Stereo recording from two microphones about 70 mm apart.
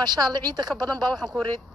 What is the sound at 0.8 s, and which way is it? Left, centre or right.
Speech, right.